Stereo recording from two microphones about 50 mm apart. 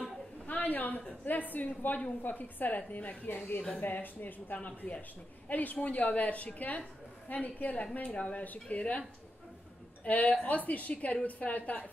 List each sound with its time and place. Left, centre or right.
0.5 s a sound: left
1.2 s a woman's voice: left
4.6 s a woman's voice: left
5.5 s a woman's voice: left
10.0 s a woman's voice: left